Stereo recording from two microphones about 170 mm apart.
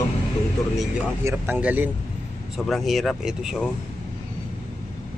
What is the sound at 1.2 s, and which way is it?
Speech, 10° right (ahead or behind).